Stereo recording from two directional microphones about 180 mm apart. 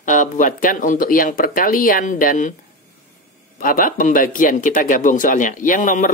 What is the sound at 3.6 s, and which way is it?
Speech, 50° left (ahead or behind).